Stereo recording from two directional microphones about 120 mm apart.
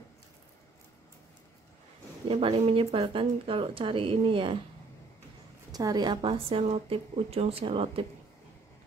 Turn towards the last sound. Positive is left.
turn(degrees=-50)  # may be behind; listen again after turning